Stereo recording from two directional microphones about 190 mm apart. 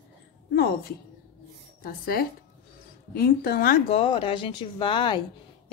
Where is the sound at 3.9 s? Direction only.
30° left (ahead or behind).